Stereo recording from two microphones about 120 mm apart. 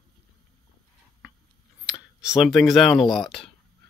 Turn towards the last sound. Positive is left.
turn(degrees=0)  # may be behind; listen again after turning